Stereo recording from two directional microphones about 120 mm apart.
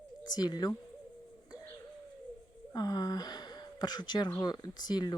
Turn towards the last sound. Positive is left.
turn(degrees=35)  # may be behind; listen again after turning